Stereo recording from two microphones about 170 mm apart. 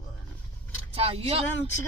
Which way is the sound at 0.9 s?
35° right (ahead or behind).